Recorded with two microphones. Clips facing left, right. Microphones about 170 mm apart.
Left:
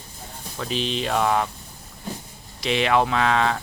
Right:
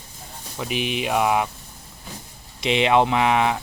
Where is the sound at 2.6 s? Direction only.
20° right (ahead or behind).